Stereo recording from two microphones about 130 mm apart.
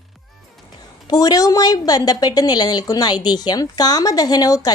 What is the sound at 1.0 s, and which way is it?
A woman's voice, 30° left (ahead or behind).